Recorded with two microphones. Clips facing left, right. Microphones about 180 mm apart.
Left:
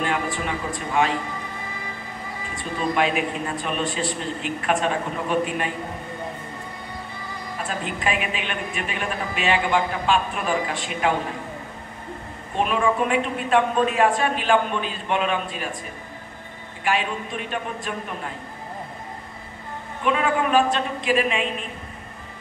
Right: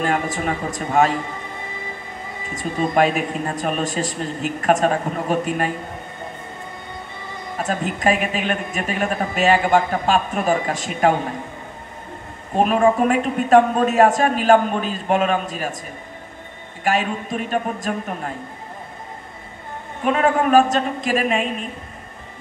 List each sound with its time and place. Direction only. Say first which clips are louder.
0.0 s speech: right 4 dB; 45° right (ahead or behind)
2.5 s speech: right 5 dB; 45° right (ahead or behind)
7.5 s speech: right 6 dB; 45° right (ahead or behind)
12.5 s speech: right 5 dB; 45° right (ahead or behind)
16.8 s speech: right 3 dB; 45° right (ahead or behind)
20.1 s speech: right 4 dB; 45° right (ahead or behind)